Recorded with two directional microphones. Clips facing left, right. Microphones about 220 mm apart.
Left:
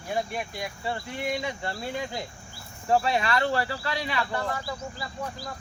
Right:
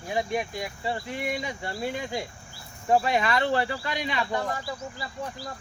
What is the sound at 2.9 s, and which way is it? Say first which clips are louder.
Speech: right 1 dB; 20° right (ahead or behind).